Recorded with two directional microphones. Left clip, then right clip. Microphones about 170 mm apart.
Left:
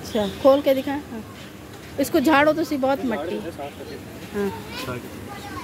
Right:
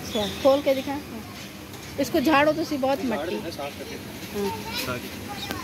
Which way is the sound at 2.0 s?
30° left (ahead or behind).